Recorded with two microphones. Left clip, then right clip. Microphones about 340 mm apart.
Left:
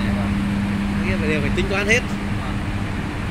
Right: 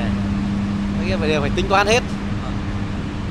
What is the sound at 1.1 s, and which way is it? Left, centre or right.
Vehicle, centre.